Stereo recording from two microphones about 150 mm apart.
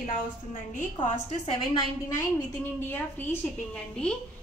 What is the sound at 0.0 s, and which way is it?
Speech, 55° left (ahead or behind).